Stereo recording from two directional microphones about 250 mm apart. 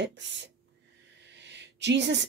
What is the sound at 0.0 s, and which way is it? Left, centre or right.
Speech, right.